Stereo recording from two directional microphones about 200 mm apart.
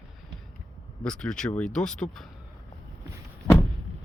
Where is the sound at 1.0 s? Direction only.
5° left (ahead or behind).